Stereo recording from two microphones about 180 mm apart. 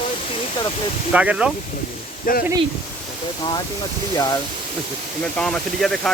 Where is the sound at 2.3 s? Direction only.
50° left (ahead or behind).